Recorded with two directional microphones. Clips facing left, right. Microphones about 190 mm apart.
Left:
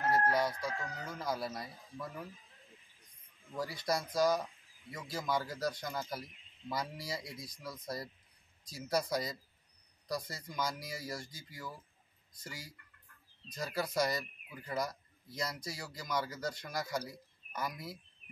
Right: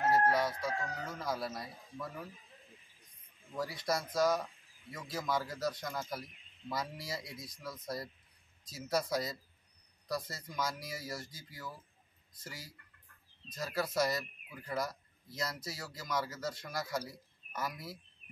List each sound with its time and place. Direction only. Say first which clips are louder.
0.0 s chicken: right 2 dB; 25° right (ahead or behind)
1.0 s speech: left 4 dB; centre (ahead or behind)
3.5 s speech: even; centre (ahead or behind)